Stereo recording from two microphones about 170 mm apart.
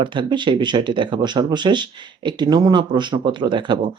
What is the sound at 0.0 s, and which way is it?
Speech, 30° right (ahead or behind).